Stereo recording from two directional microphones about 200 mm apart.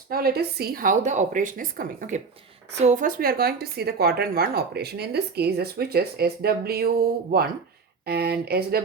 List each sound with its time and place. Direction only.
0.1 s speech: 50° right (ahead or behind)